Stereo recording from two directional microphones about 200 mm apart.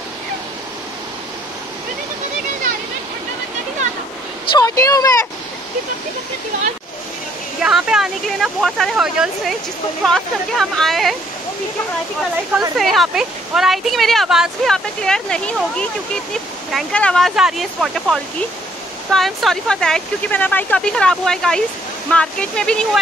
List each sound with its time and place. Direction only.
4.6 s speech: 15° left (ahead or behind)
7.6 s speech: centre (ahead or behind)
12.7 s speech: centre (ahead or behind)